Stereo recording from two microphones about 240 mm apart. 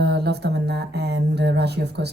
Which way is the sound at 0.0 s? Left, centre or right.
Right.